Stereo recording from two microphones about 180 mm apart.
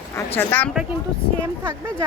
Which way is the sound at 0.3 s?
10° left (ahead or behind).